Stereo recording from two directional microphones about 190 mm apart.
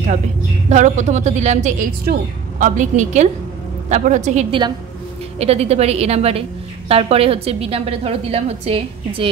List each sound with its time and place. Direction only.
0.7 s a woman's voice: 40° right (ahead or behind)